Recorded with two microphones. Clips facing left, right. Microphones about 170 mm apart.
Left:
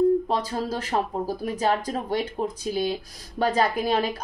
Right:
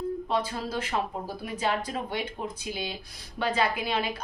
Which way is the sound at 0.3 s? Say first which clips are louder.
Left 3 dB; 40° left (ahead or behind).